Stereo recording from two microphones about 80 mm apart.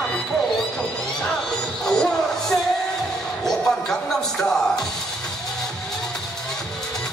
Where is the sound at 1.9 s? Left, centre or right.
Centre.